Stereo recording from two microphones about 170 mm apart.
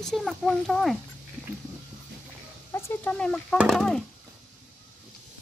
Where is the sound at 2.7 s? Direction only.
10° left (ahead or behind).